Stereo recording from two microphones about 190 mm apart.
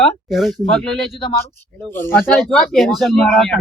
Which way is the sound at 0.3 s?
Centre (ahead or behind).